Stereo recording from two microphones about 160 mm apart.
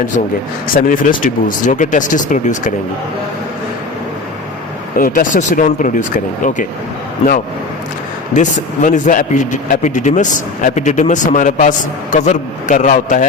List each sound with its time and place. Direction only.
0.8 s speech: 60° left (ahead or behind)
4.9 s speech: 60° left (ahead or behind)
8.3 s speech: 50° left (ahead or behind)